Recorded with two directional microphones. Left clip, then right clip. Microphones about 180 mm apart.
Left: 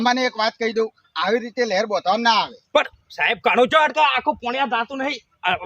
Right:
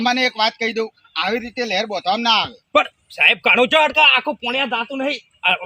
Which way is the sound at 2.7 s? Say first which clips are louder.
Right 3 dB; 30° left (ahead or behind).